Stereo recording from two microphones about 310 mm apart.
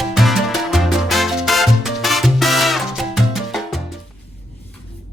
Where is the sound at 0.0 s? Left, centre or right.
Centre.